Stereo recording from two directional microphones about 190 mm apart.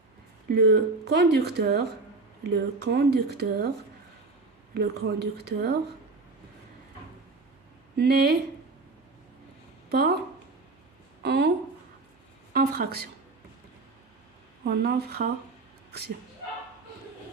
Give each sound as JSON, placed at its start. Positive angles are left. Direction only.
{"t": 0.5, "sound": "speech", "side_deg": -60}
{"t": 4.7, "sound": "speech", "side_deg": -55}
{"t": 7.9, "sound": "speech", "side_deg": -55}
{"t": 9.9, "sound": "speech", "side_deg": -55}
{"t": 11.2, "sound": "a woman's voice", "side_deg": -60}
{"t": 12.5, "sound": "speech", "side_deg": -55}
{"t": 14.6, "sound": "speech", "side_deg": -60}